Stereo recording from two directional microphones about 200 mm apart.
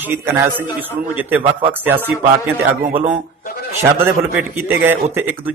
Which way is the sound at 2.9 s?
30° right (ahead or behind).